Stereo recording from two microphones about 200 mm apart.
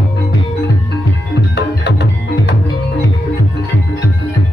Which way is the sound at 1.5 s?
60° left (ahead or behind).